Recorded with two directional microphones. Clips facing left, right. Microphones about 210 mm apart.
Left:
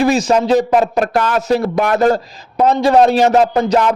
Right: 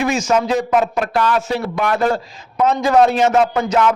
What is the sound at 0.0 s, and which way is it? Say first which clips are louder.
Speech: left 4 dB; 35° left (ahead or behind).